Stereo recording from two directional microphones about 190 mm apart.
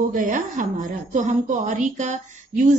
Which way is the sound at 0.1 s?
45° right (ahead or behind).